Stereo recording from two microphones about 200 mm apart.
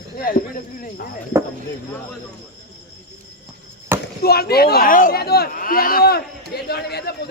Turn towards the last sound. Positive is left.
turn(degrees=55)  # may be behind; listen again after turning